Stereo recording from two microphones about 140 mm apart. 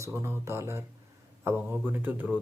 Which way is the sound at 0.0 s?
20° right (ahead or behind).